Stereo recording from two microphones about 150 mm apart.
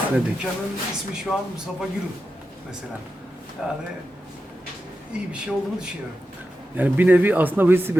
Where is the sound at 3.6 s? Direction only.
5° right (ahead or behind).